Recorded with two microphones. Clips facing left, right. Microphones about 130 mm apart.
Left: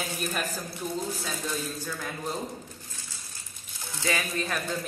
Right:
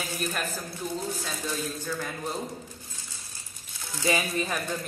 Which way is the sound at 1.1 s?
Centre (ahead or behind).